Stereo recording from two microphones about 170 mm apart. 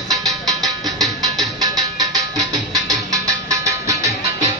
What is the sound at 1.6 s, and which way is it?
Music, 25° right (ahead or behind).